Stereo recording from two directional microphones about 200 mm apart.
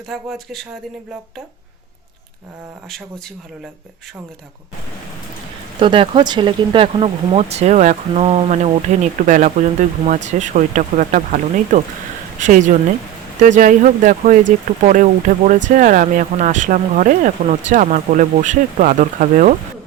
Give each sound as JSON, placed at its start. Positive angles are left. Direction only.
{"t": 0.1, "sound": "speech", "side_deg": 0}
{"t": 5.8, "sound": "speech", "side_deg": -25}